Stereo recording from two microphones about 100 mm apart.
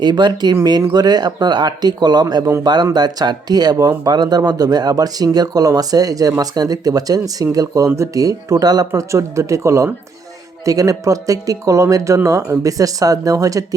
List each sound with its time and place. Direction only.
0.0 s speech: 45° right (ahead or behind)